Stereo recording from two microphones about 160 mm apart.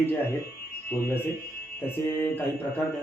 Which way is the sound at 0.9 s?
15° left (ahead or behind).